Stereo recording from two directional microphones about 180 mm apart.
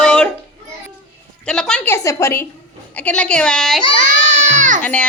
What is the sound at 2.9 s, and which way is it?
Speech, 5° left (ahead or behind).